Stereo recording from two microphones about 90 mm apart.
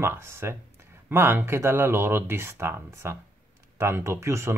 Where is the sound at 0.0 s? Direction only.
30° right (ahead or behind).